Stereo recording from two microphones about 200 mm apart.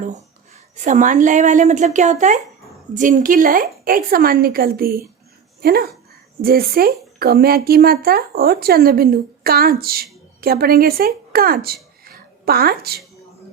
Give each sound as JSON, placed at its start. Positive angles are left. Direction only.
{"t": 0.9, "sound": "a woman's voice", "side_deg": -40}